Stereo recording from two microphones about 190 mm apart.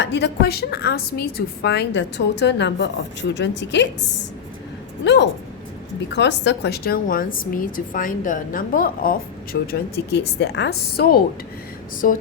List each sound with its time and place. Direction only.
0.0 s a woman's voice: 65° left (ahead or behind)
5.0 s a woman's voice: 65° left (ahead or behind); by 12.2 s 45° left (ahead or behind)